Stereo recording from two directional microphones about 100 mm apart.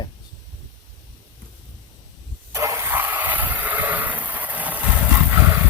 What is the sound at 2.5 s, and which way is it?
Vehicle, 30° right (ahead or behind).